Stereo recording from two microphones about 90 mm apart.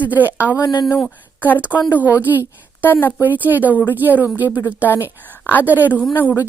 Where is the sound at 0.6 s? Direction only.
50° left (ahead or behind).